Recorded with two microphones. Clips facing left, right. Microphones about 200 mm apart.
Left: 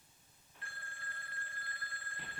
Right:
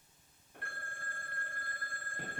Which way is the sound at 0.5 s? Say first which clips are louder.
Right 5 dB; 55° right (ahead or behind).